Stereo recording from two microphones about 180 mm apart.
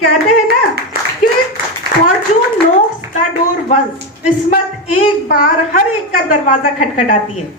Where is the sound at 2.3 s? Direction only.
35° left (ahead or behind).